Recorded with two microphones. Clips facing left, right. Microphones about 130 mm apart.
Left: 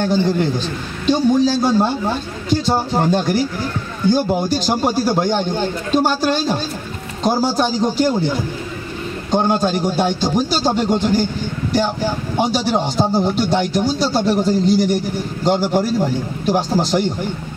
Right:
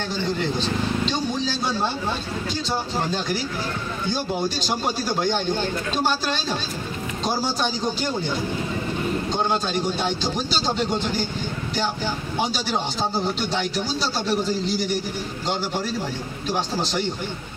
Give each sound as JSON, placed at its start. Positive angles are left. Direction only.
{"t": 1.0, "sound": "speech", "side_deg": 45}
{"t": 9.3, "sound": "speech", "side_deg": 50}
{"t": 12.4, "sound": "speech", "side_deg": 50}